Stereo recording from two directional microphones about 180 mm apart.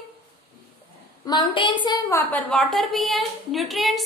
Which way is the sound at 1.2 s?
25° left (ahead or behind).